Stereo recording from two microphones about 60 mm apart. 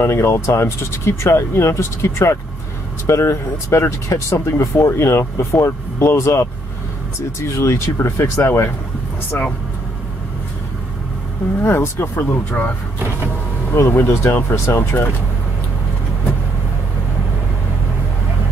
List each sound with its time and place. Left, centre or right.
0.0 s speech: left
9.3 s speech: left
11.6 s speech: left
13.8 s speech: left
14.2 s speech: left